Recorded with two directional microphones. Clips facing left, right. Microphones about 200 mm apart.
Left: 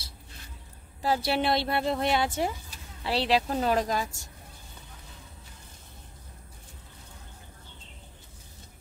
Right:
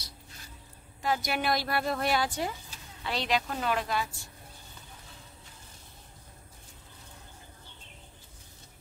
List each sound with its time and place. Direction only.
1.0 s a woman's voice: 30° left (ahead or behind)